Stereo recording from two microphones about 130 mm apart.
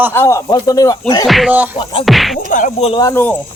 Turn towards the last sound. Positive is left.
turn(degrees=15)  # may be behind; listen again after turning